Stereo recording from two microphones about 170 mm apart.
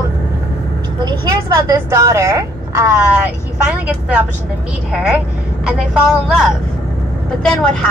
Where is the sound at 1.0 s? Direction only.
20° right (ahead or behind).